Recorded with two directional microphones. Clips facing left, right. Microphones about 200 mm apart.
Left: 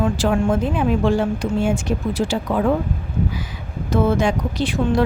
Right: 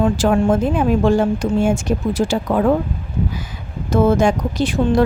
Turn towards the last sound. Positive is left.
turn(degrees=-45)  # may be behind; listen again after turning